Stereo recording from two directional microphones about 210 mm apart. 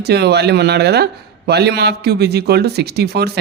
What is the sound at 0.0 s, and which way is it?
Speech, 50° right (ahead or behind).